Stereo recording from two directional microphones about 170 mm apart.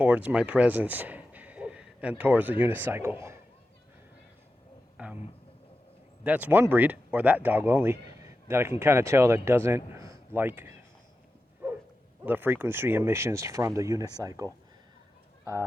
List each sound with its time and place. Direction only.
0.0 s speech: 10° right (ahead or behind)
5.0 s a man's voice: 10° right (ahead or behind)
6.2 s speech: 10° right (ahead or behind)
12.2 s speech: 10° right (ahead or behind)